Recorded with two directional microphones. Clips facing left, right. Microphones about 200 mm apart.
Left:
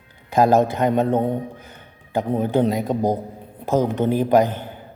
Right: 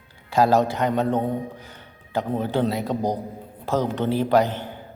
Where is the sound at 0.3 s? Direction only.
20° left (ahead or behind).